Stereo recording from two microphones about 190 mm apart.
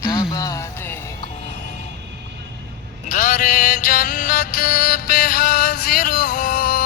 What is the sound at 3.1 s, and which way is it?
Music, 45° left (ahead or behind).